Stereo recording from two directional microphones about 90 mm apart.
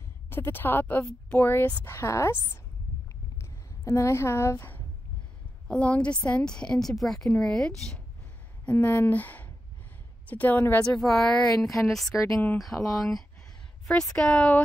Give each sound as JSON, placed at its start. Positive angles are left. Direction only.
{"t": 0.3, "sound": "speech", "side_deg": 25}
{"t": 3.8, "sound": "speech", "side_deg": 35}
{"t": 8.6, "sound": "speech", "side_deg": 20}
{"t": 10.9, "sound": "a woman's voice", "side_deg": 5}